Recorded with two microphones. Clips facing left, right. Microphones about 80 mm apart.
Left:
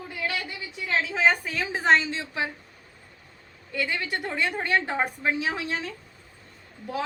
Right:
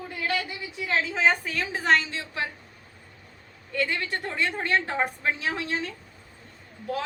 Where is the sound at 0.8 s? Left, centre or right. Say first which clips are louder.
Even; centre.